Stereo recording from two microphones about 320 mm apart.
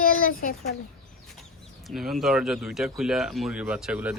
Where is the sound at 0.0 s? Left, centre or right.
Left.